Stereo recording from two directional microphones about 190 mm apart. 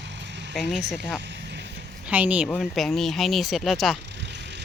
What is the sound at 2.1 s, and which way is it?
Speech, 10° right (ahead or behind).